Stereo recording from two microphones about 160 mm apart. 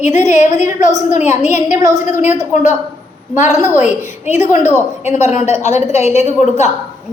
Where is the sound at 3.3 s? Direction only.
50° left (ahead or behind).